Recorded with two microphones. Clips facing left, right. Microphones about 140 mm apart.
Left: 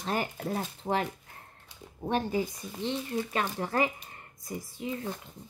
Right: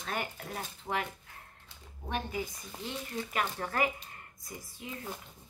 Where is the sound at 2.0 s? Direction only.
35° left (ahead or behind).